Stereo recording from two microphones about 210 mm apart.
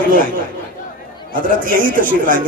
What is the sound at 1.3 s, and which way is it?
Speech, 40° right (ahead or behind).